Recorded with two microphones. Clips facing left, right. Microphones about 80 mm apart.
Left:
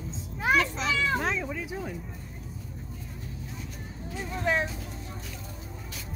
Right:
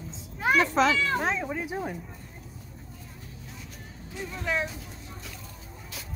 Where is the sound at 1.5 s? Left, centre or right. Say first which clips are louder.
Right 3 dB; right.